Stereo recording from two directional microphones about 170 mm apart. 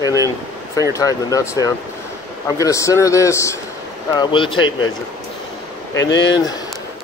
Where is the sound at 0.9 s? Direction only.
15° left (ahead or behind).